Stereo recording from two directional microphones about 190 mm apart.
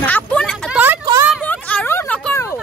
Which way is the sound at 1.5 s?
10° left (ahead or behind).